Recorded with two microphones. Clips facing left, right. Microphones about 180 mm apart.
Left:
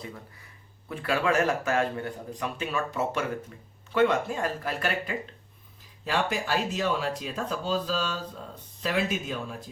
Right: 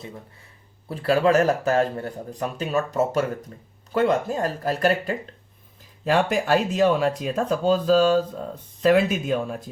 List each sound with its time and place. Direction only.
0.9 s speech: 35° right (ahead or behind)
6.1 s speech: 50° right (ahead or behind)